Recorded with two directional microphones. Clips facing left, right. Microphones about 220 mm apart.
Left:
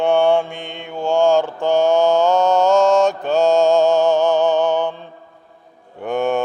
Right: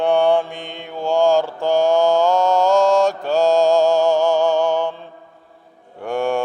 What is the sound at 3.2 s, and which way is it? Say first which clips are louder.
Mantra: left 1 dB; centre (ahead or behind).